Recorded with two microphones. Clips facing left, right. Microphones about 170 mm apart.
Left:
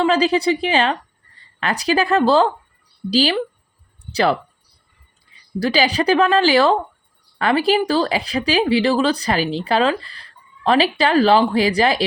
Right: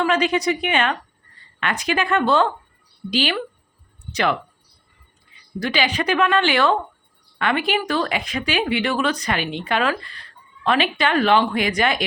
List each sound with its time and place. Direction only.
0.0 s speech: 35° left (ahead or behind)
5.5 s speech: 35° left (ahead or behind)